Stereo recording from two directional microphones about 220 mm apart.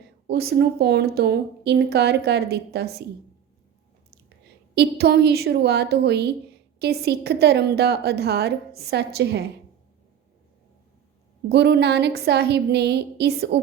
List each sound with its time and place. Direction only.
0.3 s a woman's voice: 45° right (ahead or behind)
4.7 s a woman's voice: 50° right (ahead or behind)
11.4 s a woman's voice: 50° right (ahead or behind)